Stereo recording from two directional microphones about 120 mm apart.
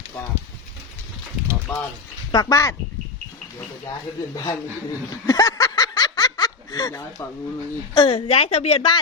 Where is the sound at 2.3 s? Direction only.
30° left (ahead or behind).